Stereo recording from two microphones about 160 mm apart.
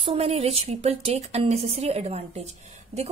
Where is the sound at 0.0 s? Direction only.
40° right (ahead or behind).